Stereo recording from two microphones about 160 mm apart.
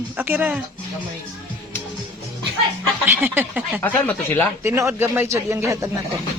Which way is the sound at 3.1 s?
15° right (ahead or behind).